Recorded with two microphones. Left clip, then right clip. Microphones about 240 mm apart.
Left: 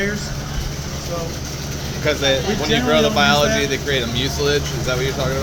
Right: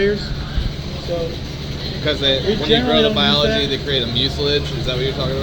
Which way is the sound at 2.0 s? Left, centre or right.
Centre.